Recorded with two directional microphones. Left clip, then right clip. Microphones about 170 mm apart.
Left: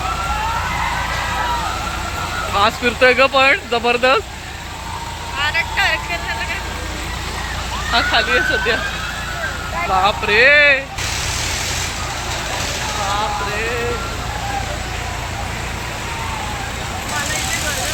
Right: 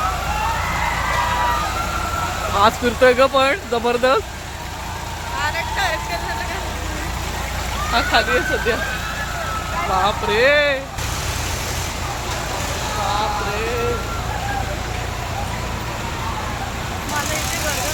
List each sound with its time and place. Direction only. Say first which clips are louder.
2.6 s speech: even; 10° right (ahead or behind)
5.4 s vehicle: left 4 dB; 40° right (ahead or behind)
7.9 s speech: left 2 dB; 5° right (ahead or behind)
9.9 s speech: left 4 dB; 5° right (ahead or behind)